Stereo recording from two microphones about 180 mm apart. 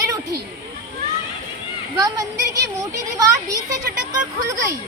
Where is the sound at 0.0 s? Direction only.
20° right (ahead or behind).